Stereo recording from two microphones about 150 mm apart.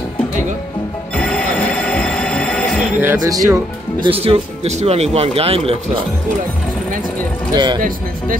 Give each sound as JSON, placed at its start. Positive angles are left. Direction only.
{"t": 1.1, "sound": "music", "side_deg": 5}
{"t": 3.0, "sound": "speech", "side_deg": -20}
{"t": 4.0, "sound": "speech", "side_deg": -40}
{"t": 7.5, "sound": "speech", "side_deg": -30}